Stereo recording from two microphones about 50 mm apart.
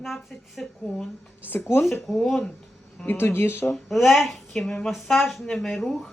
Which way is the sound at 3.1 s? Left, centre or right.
Left.